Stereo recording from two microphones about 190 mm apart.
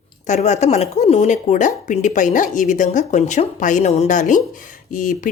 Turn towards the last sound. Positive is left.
turn(degrees=45)  # may be behind; listen again after turning